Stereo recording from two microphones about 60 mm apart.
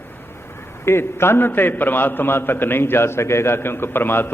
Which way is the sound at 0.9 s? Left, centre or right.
Left.